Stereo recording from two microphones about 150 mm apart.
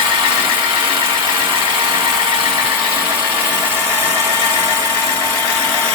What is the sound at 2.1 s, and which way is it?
Engine, 30° right (ahead or behind).